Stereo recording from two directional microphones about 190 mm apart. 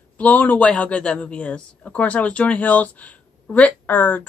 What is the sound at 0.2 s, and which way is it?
Speech, 10° left (ahead or behind).